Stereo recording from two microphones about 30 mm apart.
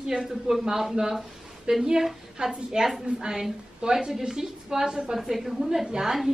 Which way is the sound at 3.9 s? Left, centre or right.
Centre.